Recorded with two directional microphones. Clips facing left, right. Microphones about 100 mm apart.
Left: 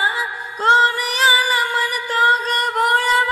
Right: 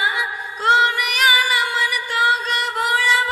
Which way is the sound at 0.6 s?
35° left (ahead or behind).